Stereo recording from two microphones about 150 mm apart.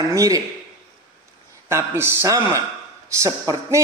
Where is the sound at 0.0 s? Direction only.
20° right (ahead or behind).